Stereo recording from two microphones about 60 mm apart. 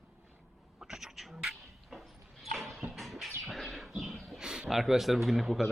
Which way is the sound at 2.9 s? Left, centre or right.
Centre.